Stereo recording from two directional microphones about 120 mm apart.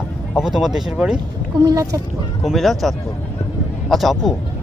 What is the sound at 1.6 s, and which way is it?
Speech, 30° right (ahead or behind).